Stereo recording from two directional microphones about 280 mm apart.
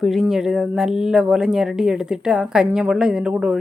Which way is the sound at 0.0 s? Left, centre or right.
Centre.